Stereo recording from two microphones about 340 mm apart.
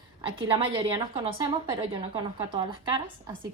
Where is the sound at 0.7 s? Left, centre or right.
Centre.